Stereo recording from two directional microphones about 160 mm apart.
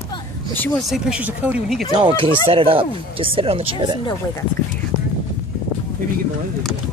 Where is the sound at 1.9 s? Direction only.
30° right (ahead or behind).